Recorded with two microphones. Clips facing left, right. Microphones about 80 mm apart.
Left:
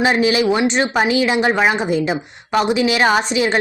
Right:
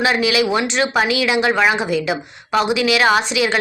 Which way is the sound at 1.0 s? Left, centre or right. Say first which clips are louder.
Left 1 dB; left.